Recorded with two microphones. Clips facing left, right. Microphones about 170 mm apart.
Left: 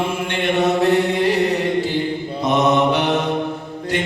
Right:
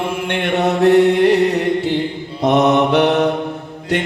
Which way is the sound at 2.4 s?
65° right (ahead or behind).